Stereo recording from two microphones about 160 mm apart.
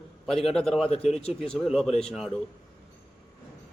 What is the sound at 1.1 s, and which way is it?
Speech, 40° left (ahead or behind).